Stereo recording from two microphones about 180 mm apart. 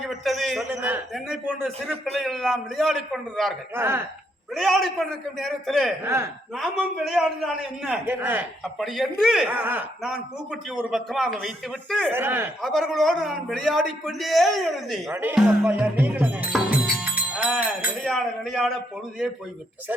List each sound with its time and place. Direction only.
0.0 s a man's voice: centre (ahead or behind)
3.8 s a man's voice: 15° right (ahead or behind)
4.5 s a man's voice: centre (ahead or behind)
12.1 s a man's voice: 10° right (ahead or behind)
12.6 s a man's voice: centre (ahead or behind)
15.1 s a man's voice: 10° right (ahead or behind)